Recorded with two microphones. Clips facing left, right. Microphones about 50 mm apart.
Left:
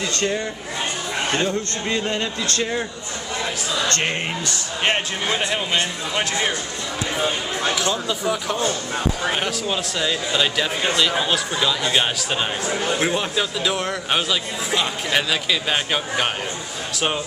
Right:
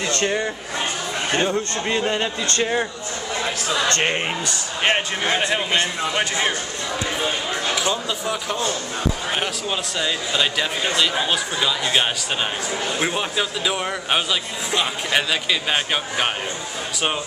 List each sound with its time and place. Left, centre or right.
0.0 s a man's voice: right; by 5.0 s centre
7.7 s a man's voice: centre